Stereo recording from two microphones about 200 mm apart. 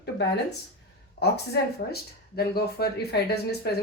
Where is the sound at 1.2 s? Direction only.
55° left (ahead or behind).